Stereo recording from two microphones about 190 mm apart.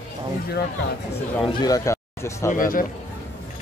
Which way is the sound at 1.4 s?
20° left (ahead or behind).